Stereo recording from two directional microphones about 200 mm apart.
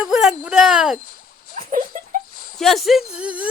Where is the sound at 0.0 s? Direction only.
5° right (ahead or behind).